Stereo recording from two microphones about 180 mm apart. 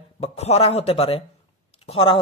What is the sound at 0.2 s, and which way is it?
Speech, 35° left (ahead or behind).